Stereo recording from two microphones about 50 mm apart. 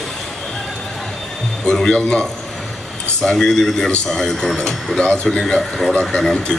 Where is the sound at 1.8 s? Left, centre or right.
Centre.